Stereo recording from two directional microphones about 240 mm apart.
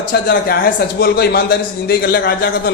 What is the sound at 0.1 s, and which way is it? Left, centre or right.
A man's voice, left.